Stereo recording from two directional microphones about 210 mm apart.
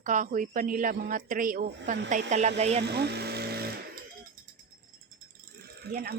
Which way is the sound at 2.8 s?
50° right (ahead or behind).